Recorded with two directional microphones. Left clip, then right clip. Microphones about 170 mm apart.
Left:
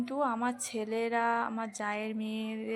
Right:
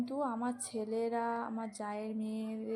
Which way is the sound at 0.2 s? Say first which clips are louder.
Left 7 dB; centre (ahead or behind).